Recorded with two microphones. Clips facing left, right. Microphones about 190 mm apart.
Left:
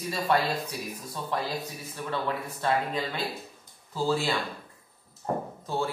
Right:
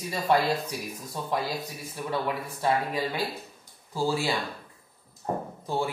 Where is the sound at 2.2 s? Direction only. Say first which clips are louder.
Right 1 dB; 10° right (ahead or behind).